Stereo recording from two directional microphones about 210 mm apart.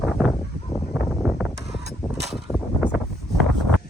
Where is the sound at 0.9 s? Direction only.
5° right (ahead or behind).